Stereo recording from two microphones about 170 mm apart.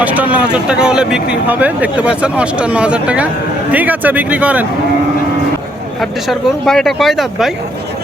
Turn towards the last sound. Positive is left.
turn(degrees=0)  # may be behind; listen again after turning